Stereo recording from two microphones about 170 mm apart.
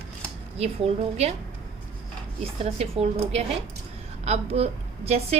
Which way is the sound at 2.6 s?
35° right (ahead or behind).